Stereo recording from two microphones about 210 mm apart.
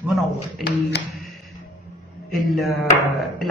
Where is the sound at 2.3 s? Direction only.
Centre (ahead or behind).